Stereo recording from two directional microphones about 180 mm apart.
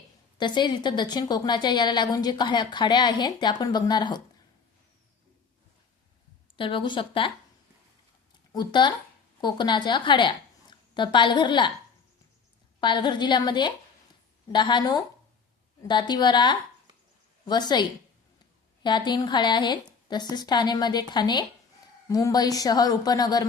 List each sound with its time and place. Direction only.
0.3 s a woman's voice: 25° left (ahead or behind)
6.6 s a woman's voice: 30° left (ahead or behind)
8.5 s a woman's voice: 25° left (ahead or behind)
12.8 s a woman's voice: 25° left (ahead or behind)